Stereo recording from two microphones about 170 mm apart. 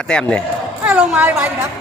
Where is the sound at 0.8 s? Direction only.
5° right (ahead or behind).